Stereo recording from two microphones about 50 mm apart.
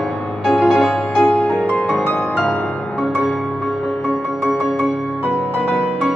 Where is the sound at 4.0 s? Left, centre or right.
Left.